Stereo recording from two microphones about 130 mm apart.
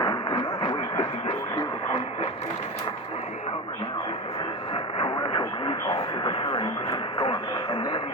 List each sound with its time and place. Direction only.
0.0 s radio: 35° left (ahead or behind)
4.7 s radio: 45° left (ahead or behind)